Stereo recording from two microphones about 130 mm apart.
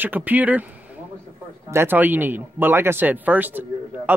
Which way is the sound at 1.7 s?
15° right (ahead or behind).